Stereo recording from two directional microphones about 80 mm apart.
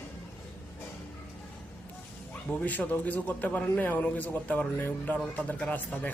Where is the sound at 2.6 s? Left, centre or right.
Centre.